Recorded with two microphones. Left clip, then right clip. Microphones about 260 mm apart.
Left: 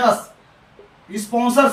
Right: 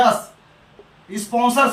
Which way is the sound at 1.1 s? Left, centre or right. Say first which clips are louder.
Left 1 dB; centre.